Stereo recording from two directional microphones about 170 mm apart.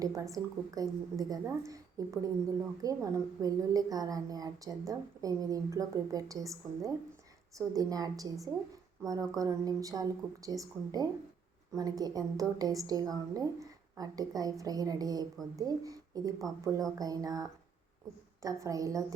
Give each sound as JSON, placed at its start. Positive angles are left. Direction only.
{"t": 0.0, "sound": "a woman's voice", "side_deg": -20}
{"t": 18.4, "sound": "a woman's voice", "side_deg": -20}